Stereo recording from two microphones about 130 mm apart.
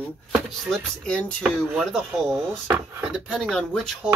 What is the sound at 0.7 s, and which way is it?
Speech, 5° left (ahead or behind).